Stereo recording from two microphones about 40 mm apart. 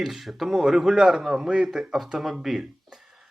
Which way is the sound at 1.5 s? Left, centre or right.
Right.